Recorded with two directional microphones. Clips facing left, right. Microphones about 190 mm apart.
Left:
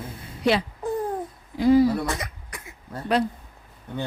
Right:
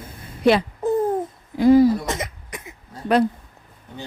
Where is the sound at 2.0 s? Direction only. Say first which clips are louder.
Right 2 dB; 20° right (ahead or behind).